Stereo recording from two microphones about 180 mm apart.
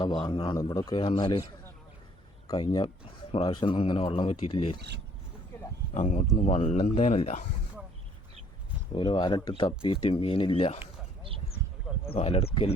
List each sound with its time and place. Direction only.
0.0 s speech: 25° left (ahead or behind)
2.5 s speech: 20° left (ahead or behind)
5.9 s speech: 40° left (ahead or behind)
8.9 s speech: 25° left (ahead or behind)
12.1 s speech: 30° left (ahead or behind)